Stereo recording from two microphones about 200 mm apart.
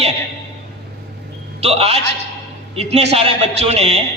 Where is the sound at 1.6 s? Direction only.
30° right (ahead or behind).